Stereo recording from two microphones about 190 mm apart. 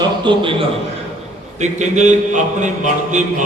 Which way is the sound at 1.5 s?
40° right (ahead or behind).